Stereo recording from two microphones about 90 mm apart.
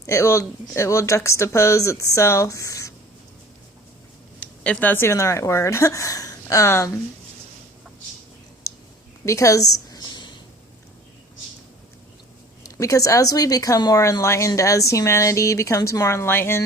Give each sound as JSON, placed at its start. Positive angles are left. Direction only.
{"t": 0.0, "sound": "speech", "side_deg": 35}
{"t": 4.6, "sound": "speech", "side_deg": 15}
{"t": 9.2, "sound": "a sound", "side_deg": 35}
{"t": 12.6, "sound": "speech", "side_deg": 40}